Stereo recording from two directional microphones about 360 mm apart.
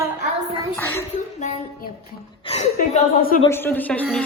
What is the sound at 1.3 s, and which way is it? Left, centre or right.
A woman's voice, centre.